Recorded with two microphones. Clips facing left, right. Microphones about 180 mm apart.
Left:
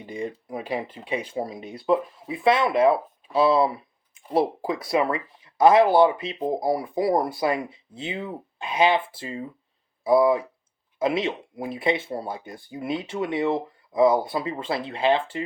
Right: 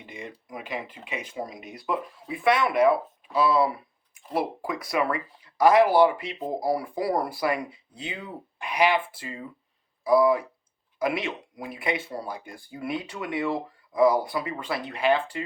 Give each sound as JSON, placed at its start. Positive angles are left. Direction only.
{"t": 0.0, "sound": "speech", "side_deg": 35}